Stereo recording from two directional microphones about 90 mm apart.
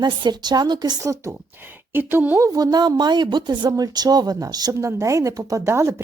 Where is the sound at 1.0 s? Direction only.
35° right (ahead or behind).